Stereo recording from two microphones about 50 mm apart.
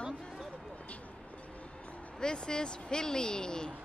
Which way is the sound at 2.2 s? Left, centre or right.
Centre.